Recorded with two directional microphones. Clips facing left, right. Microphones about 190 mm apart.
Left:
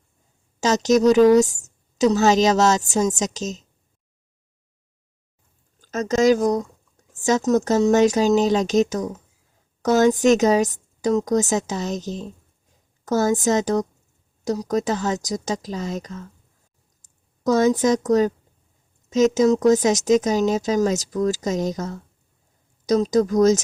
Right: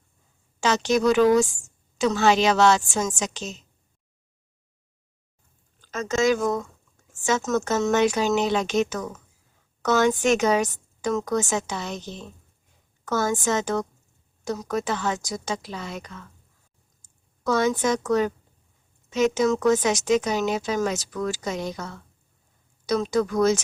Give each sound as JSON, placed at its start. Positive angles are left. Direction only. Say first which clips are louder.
{"t": 0.6, "sound": "a woman's voice", "louder": "left 4 dB", "side_deg": 40}
{"t": 5.8, "sound": "a woman's voice", "louder": "left 5 dB", "side_deg": 40}